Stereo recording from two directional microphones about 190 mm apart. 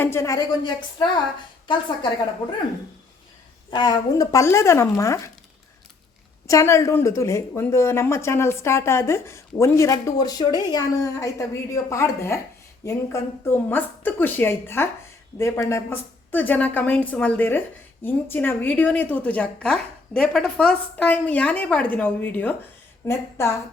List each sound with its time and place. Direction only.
0.0 s a woman's voice: 15° left (ahead or behind)
3.7 s a woman's voice: 20° left (ahead or behind)
6.5 s a woman's voice: 15° left (ahead or behind)